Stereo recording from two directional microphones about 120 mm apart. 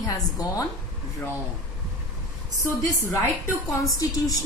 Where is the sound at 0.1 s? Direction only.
30° left (ahead or behind).